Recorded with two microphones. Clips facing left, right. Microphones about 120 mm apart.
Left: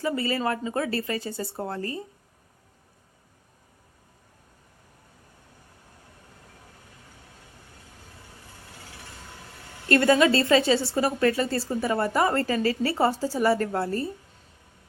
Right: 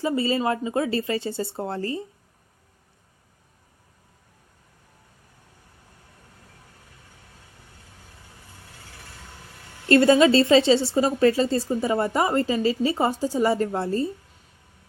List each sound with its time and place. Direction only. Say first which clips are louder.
0.0 s a woman's voice: right 3 dB; 20° right (ahead or behind)
9.9 s a woman's voice: right 4 dB; 25° right (ahead or behind)